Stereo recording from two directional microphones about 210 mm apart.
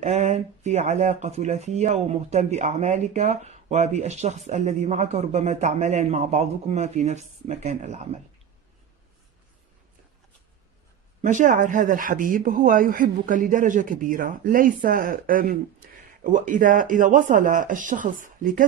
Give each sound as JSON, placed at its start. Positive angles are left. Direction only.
{"t": 0.0, "sound": "speech", "side_deg": -35}
{"t": 11.2, "sound": "speech", "side_deg": -35}